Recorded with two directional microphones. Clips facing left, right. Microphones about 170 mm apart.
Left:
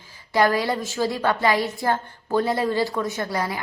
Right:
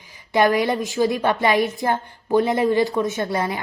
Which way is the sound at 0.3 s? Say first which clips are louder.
Right 3 dB; 20° right (ahead or behind).